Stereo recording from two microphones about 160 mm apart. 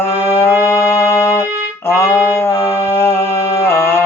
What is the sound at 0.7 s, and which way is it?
Music, 15° left (ahead or behind).